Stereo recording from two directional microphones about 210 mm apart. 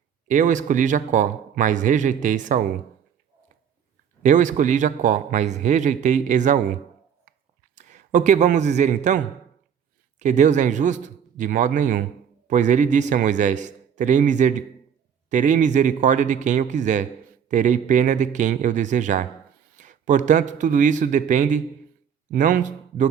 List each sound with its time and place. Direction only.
0.3 s a man's voice: 35° right (ahead or behind)
4.2 s a man's voice: 35° right (ahead or behind)
7.8 s a man's voice: 35° right (ahead or behind)